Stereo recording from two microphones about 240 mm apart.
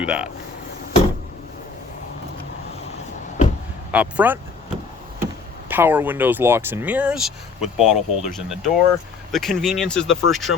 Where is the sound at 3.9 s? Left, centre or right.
Centre.